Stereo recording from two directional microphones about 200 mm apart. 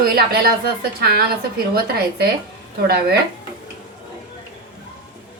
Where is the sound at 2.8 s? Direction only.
50° right (ahead or behind).